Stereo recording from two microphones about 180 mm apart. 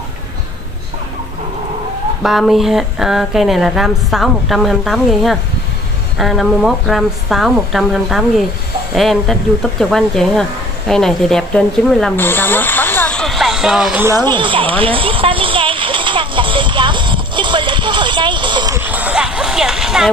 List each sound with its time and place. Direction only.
2.2 s speech: centre (ahead or behind)
14.0 s a sound: 20° right (ahead or behind)
18.8 s music: 10° right (ahead or behind)